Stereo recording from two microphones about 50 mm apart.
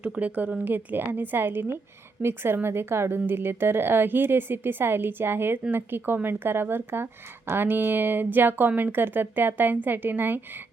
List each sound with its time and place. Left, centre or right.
0.0 s speech: right